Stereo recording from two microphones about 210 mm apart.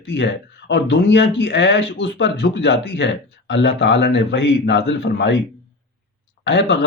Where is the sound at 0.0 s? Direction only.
55° left (ahead or behind).